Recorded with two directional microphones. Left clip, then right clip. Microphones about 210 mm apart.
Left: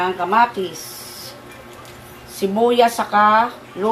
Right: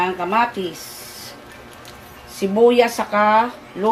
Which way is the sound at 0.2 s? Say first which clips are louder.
Left 6 dB; 20° right (ahead or behind).